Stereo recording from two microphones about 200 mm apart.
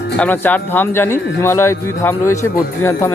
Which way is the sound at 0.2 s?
10° left (ahead or behind).